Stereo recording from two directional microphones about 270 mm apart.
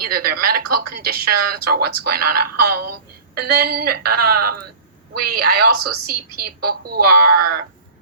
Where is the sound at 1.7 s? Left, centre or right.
Right.